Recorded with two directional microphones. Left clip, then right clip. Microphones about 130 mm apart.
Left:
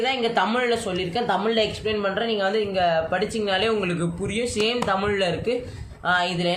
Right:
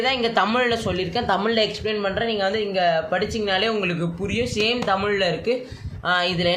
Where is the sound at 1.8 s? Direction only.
15° right (ahead or behind).